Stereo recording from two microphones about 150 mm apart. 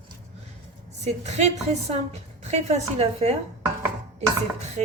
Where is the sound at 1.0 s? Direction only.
50° right (ahead or behind).